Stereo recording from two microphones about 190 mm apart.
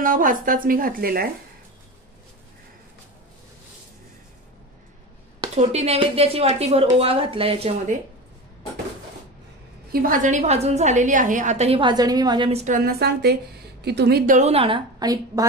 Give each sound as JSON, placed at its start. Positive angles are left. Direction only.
{"t": 0.0, "sound": "a woman's voice", "side_deg": -45}
{"t": 5.6, "sound": "a woman's voice", "side_deg": -35}
{"t": 10.0, "sound": "a woman's voice", "side_deg": -45}